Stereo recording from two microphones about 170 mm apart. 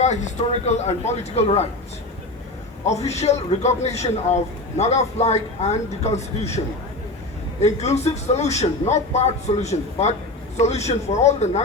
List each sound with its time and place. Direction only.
0.0 s a man's voice: 45° left (ahead or behind)
2.8 s a man's voice: 40° left (ahead or behind)
7.6 s a man's voice: 40° left (ahead or behind)